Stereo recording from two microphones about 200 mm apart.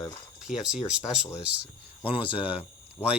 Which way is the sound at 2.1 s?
25° left (ahead or behind).